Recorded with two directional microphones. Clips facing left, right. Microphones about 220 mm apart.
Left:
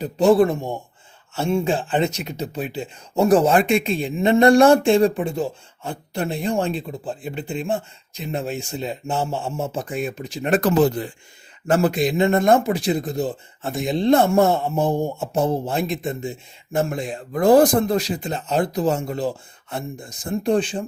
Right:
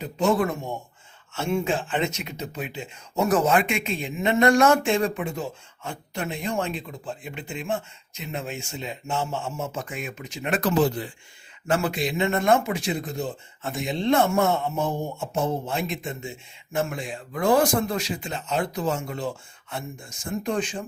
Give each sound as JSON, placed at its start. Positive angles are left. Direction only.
{"t": 0.0, "sound": "speech", "side_deg": 35}